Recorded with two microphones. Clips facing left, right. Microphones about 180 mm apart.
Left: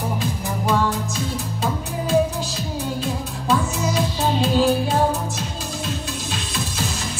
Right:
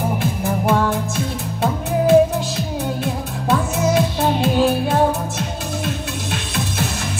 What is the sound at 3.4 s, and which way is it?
Music, 60° right (ahead or behind).